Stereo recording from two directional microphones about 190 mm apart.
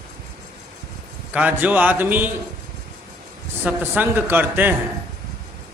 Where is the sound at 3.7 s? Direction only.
10° right (ahead or behind).